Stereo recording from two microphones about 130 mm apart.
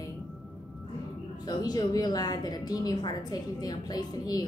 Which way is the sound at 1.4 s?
30° left (ahead or behind).